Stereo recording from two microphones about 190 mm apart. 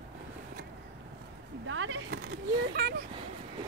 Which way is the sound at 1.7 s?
90° right.